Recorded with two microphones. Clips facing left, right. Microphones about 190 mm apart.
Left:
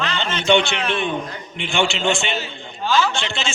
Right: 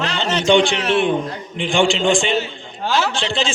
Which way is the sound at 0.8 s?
75° right (ahead or behind).